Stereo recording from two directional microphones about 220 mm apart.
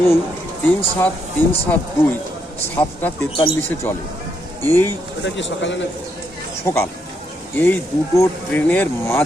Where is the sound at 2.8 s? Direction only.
10° left (ahead or behind).